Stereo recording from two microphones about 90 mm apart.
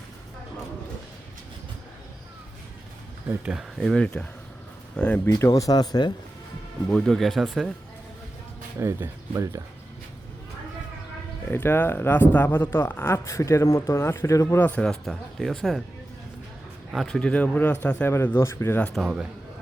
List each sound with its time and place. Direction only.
3.5 s speech: 5° right (ahead or behind)
3.9 s speech: 10° left (ahead or behind)
5.5 s speech: 45° left (ahead or behind)
6.9 s speech: 5° left (ahead or behind)
8.8 s speech: 30° right (ahead or behind)
11.5 s speech: 20° left (ahead or behind)
14.6 s speech: 20° left (ahead or behind)
14.8 s speech: centre (ahead or behind)
16.9 s speech: centre (ahead or behind)
17.2 s speech: 10° left (ahead or behind); by 18.8 s 30° left (ahead or behind)
18.9 s a man's voice: 10° right (ahead or behind)